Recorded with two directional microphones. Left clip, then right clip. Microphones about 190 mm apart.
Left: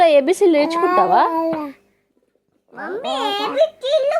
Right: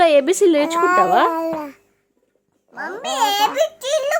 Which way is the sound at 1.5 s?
5° left (ahead or behind).